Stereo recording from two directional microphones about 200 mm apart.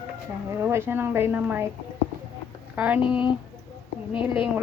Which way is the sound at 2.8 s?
10° right (ahead or behind).